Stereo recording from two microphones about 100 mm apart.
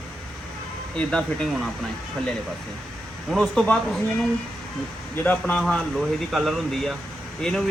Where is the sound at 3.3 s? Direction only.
Centre (ahead or behind).